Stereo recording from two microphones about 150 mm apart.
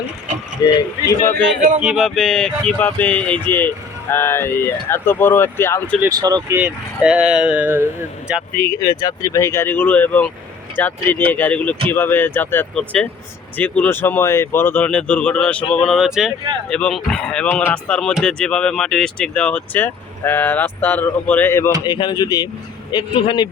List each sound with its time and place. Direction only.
0.6 s speech: 25° left (ahead or behind)
1.8 s speech: 5° right (ahead or behind); by 6.0 s 15° left (ahead or behind)
6.1 s speech: 25° right (ahead or behind)
6.6 s speech: 5° right (ahead or behind)
8.8 s speech: 30° left (ahead or behind)
21.8 s speech: 30° left (ahead or behind)